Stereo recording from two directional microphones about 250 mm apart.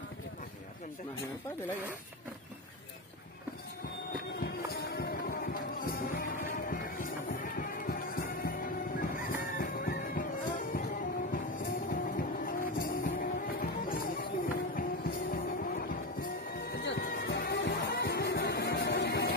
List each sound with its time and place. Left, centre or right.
4.4 s music: left